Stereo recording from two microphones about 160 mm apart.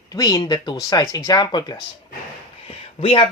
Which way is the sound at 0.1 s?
25° left (ahead or behind).